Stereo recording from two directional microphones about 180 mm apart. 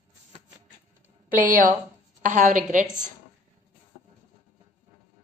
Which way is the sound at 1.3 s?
50° right (ahead or behind).